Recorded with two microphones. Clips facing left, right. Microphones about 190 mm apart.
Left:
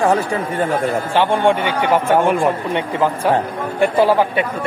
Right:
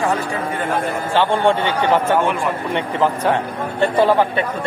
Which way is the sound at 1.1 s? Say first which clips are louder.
Even; 15° left (ahead or behind).